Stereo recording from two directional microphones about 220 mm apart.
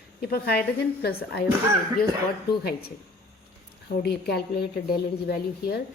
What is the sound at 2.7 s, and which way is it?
Speech, 45° left (ahead or behind).